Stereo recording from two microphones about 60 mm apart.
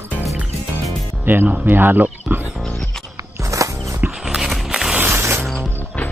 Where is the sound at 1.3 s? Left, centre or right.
Right.